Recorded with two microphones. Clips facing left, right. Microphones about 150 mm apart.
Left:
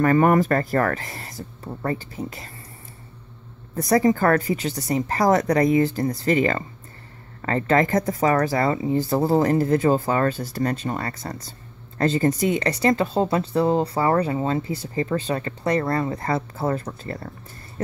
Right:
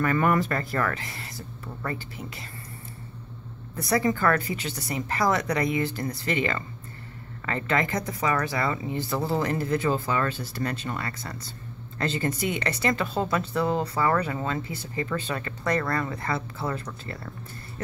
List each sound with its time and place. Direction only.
0.0 s speech: 40° left (ahead or behind)
3.7 s speech: 40° left (ahead or behind)
16.2 s speech: 40° left (ahead or behind)